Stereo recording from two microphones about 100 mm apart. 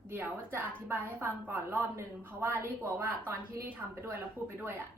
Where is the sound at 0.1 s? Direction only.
20° right (ahead or behind).